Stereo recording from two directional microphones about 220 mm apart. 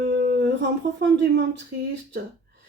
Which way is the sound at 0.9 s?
50° right (ahead or behind).